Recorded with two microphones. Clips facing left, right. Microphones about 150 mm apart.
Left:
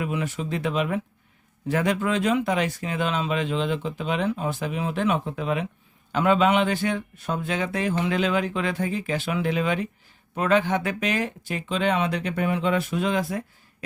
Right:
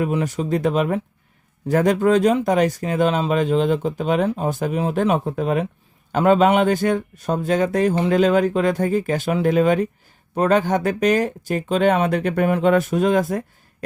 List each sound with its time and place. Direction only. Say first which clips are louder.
0.0 s speech: right 6 dB; 40° right (ahead or behind)